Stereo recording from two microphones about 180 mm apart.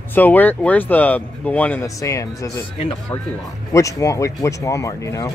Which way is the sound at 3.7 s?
15° left (ahead or behind).